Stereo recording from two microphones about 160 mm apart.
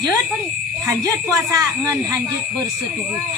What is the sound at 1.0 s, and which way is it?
A woman's voice, 20° right (ahead or behind).